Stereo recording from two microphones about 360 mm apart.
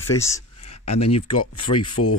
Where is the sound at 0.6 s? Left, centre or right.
Left.